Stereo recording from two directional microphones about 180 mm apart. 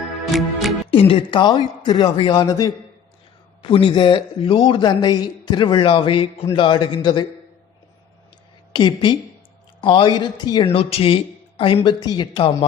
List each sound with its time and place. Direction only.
0.3 s music: centre (ahead or behind)
0.9 s a man's voice: 30° left (ahead or behind)
3.6 s a man's voice: 30° left (ahead or behind)
8.7 s a woman's voice: 25° left (ahead or behind)